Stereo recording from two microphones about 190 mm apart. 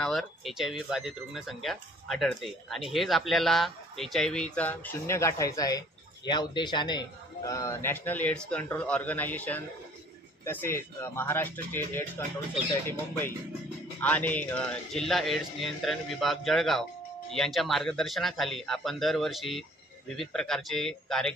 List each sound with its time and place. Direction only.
0.0 s speech: centre (ahead or behind)